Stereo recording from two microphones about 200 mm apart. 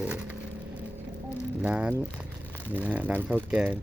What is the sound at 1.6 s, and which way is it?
Speech, 5° right (ahead or behind).